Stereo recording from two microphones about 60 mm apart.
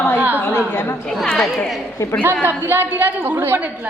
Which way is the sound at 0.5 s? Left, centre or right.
Left.